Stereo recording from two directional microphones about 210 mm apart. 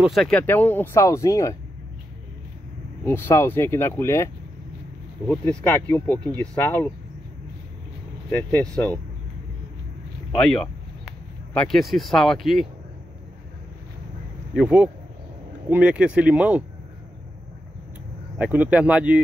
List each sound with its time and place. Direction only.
0.0 s speech: centre (ahead or behind)
3.1 s speech: 10° left (ahead or behind)
8.3 s speech: 5° left (ahead or behind)
10.4 s speech: centre (ahead or behind)
14.5 s speech: 5° right (ahead or behind)
18.4 s speech: 5° right (ahead or behind)